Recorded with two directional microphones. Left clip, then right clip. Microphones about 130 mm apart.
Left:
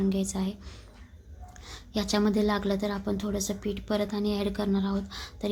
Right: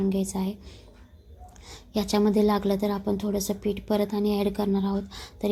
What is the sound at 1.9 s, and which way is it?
A woman's voice, 15° right (ahead or behind).